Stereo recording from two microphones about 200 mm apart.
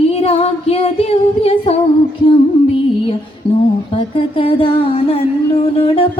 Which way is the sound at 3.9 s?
30° left (ahead or behind).